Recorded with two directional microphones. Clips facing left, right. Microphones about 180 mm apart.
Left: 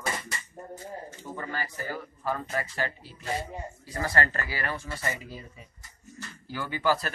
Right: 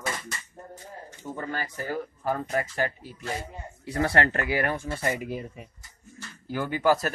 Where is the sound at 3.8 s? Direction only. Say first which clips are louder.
Right 5 dB; 65° right (ahead or behind).